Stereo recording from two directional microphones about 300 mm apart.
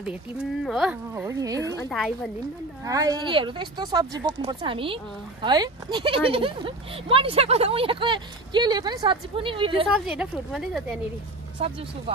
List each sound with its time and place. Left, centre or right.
0.0 s speech: centre
1.8 s speech: centre
2.8 s speech: centre
10.0 s speech: centre
11.6 s speech: centre